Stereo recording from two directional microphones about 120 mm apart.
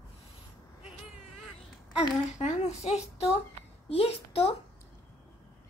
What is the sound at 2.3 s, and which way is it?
A woman's voice, 65° left (ahead or behind).